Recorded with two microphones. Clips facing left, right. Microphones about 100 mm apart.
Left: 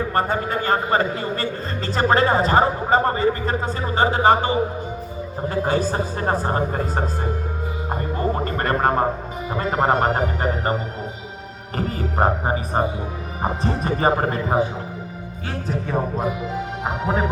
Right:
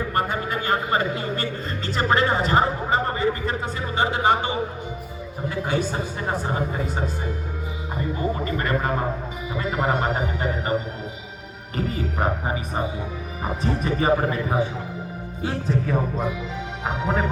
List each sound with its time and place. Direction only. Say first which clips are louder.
0.1 s a man's voice: left 2 dB; 35° left (ahead or behind)
5.6 s a man's voice: left 3 dB; 40° left (ahead or behind)
11.8 s a man's voice: left 4 dB; 40° left (ahead or behind)
15.7 s speech: left 1 dB; 20° left (ahead or behind)
16.1 s a man's voice: left 3 dB; 5° left (ahead or behind)